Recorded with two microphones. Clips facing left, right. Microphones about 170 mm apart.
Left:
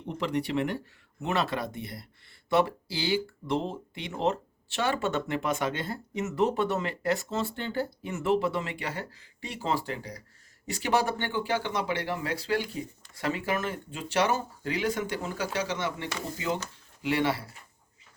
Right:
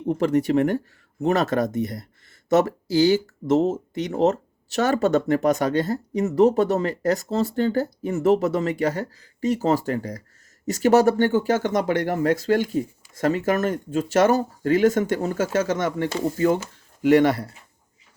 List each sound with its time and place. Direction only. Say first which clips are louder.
0.1 s speech: right 10 dB; 45° right (ahead or behind)